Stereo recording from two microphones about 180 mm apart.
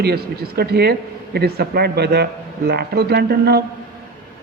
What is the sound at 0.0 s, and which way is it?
A man's voice, 60° right (ahead or behind).